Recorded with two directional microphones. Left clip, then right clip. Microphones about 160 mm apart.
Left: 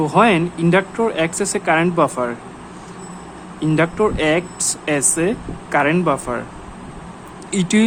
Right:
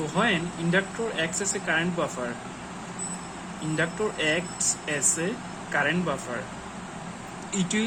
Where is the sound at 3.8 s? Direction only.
70° left (ahead or behind).